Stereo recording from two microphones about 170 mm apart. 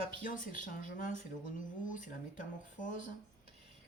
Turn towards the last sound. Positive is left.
turn(degrees=50)  # may be behind; listen again after turning